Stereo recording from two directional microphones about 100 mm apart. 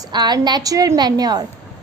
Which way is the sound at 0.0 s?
45° right (ahead or behind).